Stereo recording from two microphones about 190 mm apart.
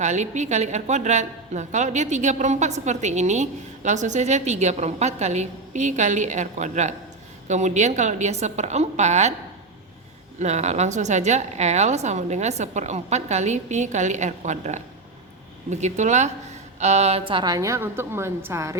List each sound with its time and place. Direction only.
0.0 s a woman's voice: 35° right (ahead or behind)
10.4 s a woman's voice: 35° right (ahead or behind); by 18.8 s 15° right (ahead or behind)